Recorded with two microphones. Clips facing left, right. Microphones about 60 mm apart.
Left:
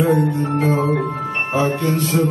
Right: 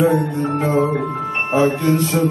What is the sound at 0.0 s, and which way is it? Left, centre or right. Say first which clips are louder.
Music: even; centre.